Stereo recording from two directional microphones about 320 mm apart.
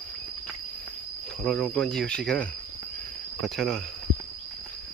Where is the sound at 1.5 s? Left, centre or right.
Centre.